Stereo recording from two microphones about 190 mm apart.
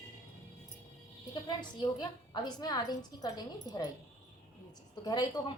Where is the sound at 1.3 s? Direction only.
25° left (ahead or behind).